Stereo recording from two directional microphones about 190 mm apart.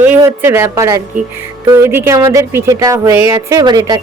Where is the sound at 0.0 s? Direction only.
10° right (ahead or behind).